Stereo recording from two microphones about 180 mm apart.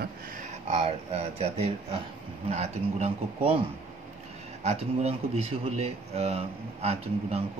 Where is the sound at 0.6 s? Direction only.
35° right (ahead or behind).